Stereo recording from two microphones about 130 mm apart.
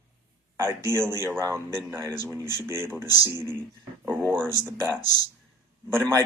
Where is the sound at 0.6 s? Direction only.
20° right (ahead or behind).